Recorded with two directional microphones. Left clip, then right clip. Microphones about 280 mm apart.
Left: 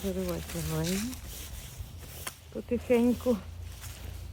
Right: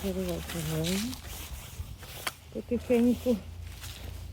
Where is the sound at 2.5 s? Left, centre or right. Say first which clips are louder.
Left 1 dB; centre.